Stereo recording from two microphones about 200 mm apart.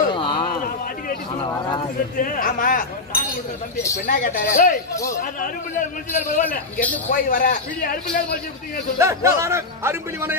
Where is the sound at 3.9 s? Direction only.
45° left (ahead or behind).